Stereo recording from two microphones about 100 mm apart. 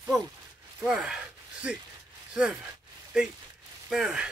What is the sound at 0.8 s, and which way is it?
Speech, 5° right (ahead or behind).